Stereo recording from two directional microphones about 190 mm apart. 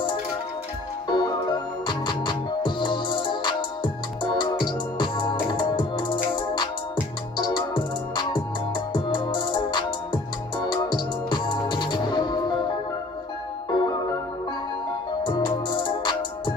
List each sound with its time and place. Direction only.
1.0 s music: 20° left (ahead or behind)
15.2 s music: 25° left (ahead or behind)